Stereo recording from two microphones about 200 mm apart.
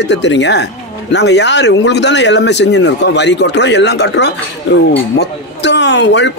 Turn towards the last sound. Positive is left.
turn(degrees=60)  # may be behind; listen again after turning